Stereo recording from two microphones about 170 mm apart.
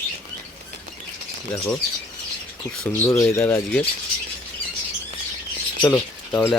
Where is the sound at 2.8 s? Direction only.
15° left (ahead or behind).